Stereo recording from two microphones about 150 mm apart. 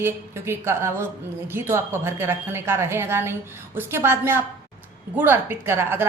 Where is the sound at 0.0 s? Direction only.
15° right (ahead or behind).